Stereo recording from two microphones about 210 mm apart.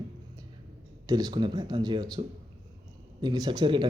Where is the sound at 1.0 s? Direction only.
20° right (ahead or behind).